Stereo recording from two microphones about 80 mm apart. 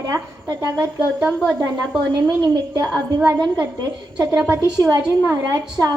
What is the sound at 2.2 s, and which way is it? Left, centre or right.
Speech, right.